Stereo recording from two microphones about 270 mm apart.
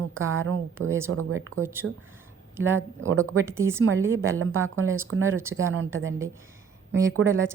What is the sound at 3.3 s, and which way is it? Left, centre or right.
Speech, centre.